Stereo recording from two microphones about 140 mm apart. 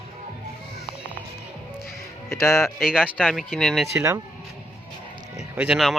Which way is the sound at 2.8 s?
5° right (ahead or behind).